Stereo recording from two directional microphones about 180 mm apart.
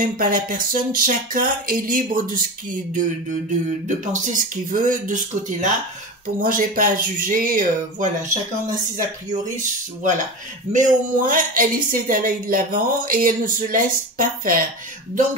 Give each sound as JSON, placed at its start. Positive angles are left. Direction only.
{"t": 0.0, "sound": "a woman's voice", "side_deg": -50}
{"t": 3.8, "sound": "a woman's voice", "side_deg": -45}
{"t": 9.3, "sound": "a woman's voice", "side_deg": -45}